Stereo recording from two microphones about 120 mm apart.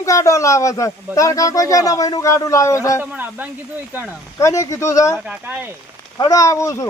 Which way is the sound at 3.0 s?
15° right (ahead or behind).